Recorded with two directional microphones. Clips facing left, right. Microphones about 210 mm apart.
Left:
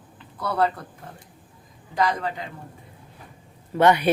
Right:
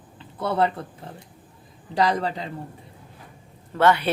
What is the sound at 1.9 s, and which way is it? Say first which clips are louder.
Speech: right 2 dB; 35° right (ahead or behind).